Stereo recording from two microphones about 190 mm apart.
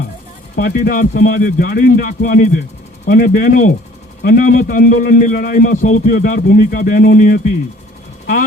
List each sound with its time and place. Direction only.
0.5 s a man's voice: 50° left (ahead or behind)